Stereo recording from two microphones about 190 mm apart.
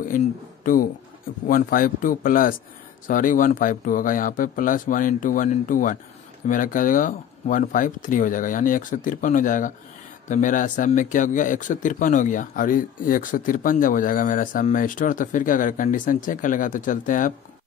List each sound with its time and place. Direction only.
0.7 s speech: 45° left (ahead or behind)